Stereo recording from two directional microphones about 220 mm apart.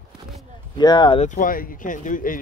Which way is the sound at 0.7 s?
20° left (ahead or behind).